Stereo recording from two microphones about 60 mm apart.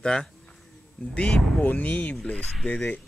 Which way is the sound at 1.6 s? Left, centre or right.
Left.